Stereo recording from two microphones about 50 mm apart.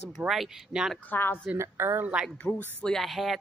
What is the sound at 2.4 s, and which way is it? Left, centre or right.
Speech, left.